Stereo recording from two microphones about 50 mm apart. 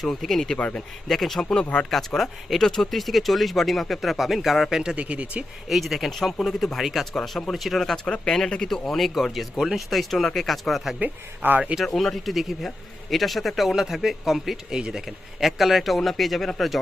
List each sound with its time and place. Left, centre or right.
0.0 s speech: centre
1.5 s speech: left
1.9 s speech: centre
4.9 s speech: right
5.6 s speech: centre
8.0 s speech: centre
11.0 s speech: right
11.9 s speech: centre
14.8 s speech: centre
15.0 s speech: centre